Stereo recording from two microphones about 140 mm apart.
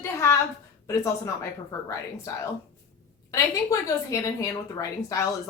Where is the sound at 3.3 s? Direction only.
25° left (ahead or behind).